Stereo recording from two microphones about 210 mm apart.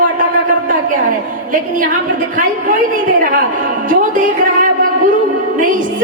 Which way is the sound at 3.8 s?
40° right (ahead or behind).